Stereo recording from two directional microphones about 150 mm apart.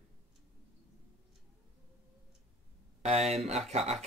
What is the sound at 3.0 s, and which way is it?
Speech, 45° right (ahead or behind).